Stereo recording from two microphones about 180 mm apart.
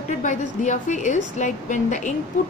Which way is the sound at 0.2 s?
45° left (ahead or behind).